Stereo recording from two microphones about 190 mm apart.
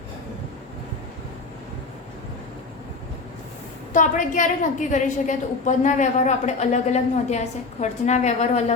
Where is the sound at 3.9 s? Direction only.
45° left (ahead or behind).